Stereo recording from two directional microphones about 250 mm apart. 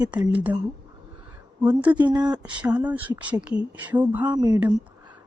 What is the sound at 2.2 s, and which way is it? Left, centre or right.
Speech, centre.